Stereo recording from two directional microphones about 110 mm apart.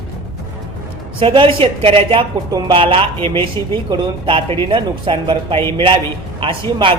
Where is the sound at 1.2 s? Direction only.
55° right (ahead or behind).